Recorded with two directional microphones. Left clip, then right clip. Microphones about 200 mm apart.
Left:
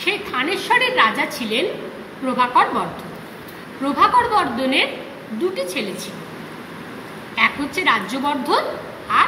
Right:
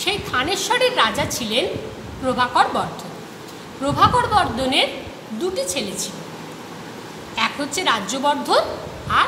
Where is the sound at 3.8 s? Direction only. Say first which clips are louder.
Left 1 dB; 25° right (ahead or behind).